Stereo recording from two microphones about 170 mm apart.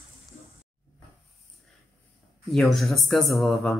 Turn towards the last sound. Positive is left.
turn(degrees=0)  # may be behind; listen again after turning